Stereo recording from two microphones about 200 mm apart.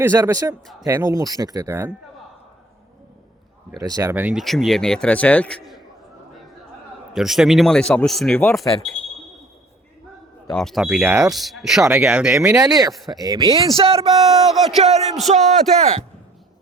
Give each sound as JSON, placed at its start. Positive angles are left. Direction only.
{"t": 0.0, "sound": "speech", "side_deg": -10}
{"t": 3.8, "sound": "speech", "side_deg": -20}
{"t": 7.1, "sound": "speech", "side_deg": 0}
{"t": 10.5, "sound": "speech", "side_deg": 0}
{"t": 12.5, "sound": "speech", "side_deg": -15}
{"t": 12.9, "sound": "speech", "side_deg": 0}
{"t": 13.1, "sound": "speech", "side_deg": -20}
{"t": 15.3, "sound": "speech", "side_deg": -35}